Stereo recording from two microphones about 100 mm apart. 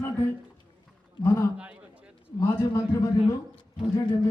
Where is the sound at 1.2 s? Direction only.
30° left (ahead or behind).